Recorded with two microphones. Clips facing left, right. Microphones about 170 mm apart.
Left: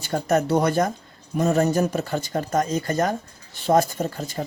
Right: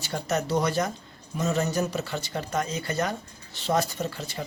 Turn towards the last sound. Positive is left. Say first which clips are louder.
# left 5 dB
turn(degrees=45)  # may be behind; listen again after turning